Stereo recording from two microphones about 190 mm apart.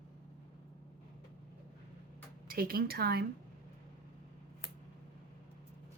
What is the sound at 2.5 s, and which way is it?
Speech, 50° right (ahead or behind).